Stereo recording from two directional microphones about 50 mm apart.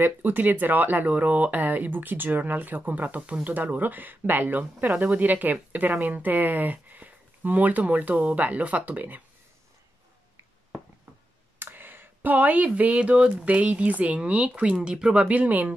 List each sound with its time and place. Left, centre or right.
0.0 s speech: right
11.6 s speech: right; by 15.2 s centre
15.2 s speech: right